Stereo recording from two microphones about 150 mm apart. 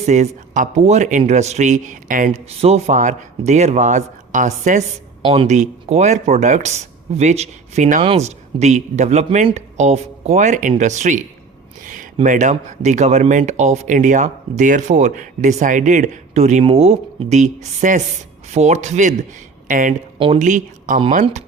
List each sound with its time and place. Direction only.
0.0 s speech: 50° right (ahead or behind)
2.5 s speech: 45° right (ahead or behind)
5.2 s speech: 35° right (ahead or behind)
5.5 s speech: 50° right (ahead or behind)
12.2 s speech: 55° right (ahead or behind)
20.1 s speech: 35° right (ahead or behind)
20.4 s speech: 55° right (ahead or behind)